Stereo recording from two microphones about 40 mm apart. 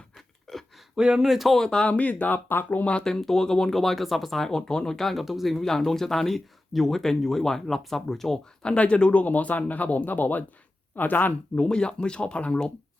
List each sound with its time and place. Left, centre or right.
0.5 s a sound: centre
0.9 s speech: centre
1.3 s speech: centre
1.5 s speech: centre
1.8 s speech: left
3.0 s speech: centre
5.2 s speech: centre
5.5 s speech: centre
8.6 s speech: left
9.2 s speech: left
11.5 s speech: left